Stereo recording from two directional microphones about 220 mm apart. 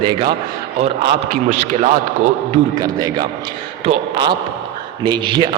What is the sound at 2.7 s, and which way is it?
A man's voice, 15° right (ahead or behind).